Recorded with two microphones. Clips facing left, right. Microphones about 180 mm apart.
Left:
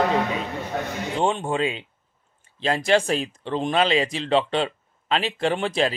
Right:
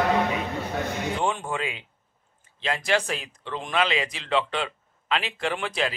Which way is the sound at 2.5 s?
35° left (ahead or behind).